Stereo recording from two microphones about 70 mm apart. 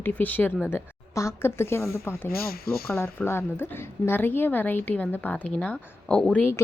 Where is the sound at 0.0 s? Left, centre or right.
Left.